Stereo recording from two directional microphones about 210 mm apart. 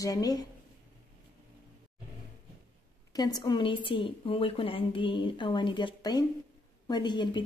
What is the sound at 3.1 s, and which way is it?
A woman's voice, 20° left (ahead or behind).